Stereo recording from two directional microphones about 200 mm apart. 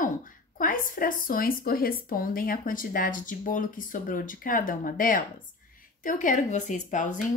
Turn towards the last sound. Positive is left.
turn(degrees=40)  # may be behind; listen again after turning